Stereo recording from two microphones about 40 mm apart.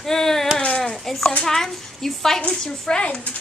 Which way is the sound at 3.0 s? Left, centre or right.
Left.